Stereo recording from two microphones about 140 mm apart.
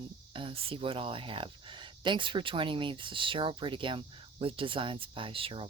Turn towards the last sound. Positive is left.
turn(degrees=-40)  # may be behind; listen again after turning